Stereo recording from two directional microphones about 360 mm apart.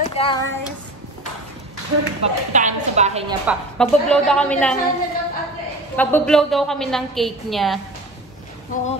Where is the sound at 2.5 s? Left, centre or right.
Centre.